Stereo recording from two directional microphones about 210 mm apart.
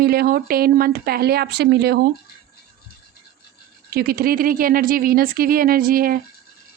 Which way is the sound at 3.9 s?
45° right (ahead or behind).